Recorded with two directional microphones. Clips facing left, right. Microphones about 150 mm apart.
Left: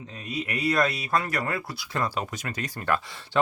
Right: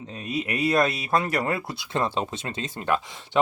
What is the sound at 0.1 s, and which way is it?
Speech, 25° right (ahead or behind).